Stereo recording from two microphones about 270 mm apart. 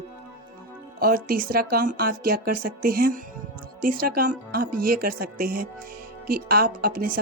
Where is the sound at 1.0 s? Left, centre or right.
Right.